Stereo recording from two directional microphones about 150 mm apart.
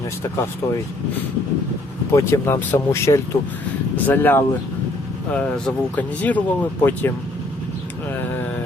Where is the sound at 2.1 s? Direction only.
20° left (ahead or behind).